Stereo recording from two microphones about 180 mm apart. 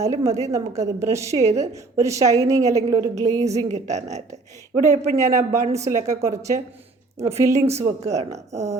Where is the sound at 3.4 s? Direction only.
40° right (ahead or behind).